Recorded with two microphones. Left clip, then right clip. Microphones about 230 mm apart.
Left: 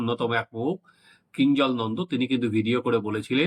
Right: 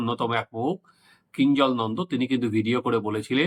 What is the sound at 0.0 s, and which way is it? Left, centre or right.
Speech, centre.